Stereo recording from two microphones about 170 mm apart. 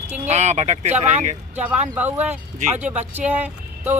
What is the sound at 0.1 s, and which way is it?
Speech, 40° right (ahead or behind).